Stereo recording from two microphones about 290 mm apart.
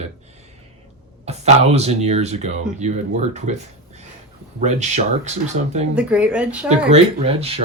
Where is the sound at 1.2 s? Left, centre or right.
Right.